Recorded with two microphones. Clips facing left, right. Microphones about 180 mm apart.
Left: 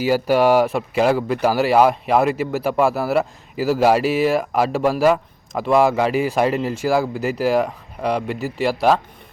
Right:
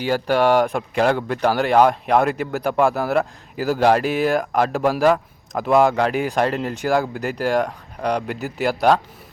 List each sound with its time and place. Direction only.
0.0 s speech: 5° left (ahead or behind)